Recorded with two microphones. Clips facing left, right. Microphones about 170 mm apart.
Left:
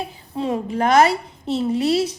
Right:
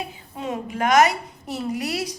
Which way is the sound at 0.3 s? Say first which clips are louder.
Left 5 dB; 30° left (ahead or behind).